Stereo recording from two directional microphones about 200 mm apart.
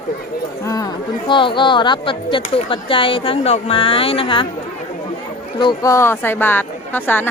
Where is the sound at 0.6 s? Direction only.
15° left (ahead or behind).